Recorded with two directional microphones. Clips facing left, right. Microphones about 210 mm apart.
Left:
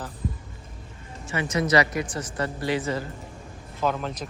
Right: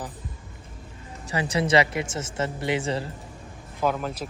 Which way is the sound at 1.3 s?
35° right (ahead or behind).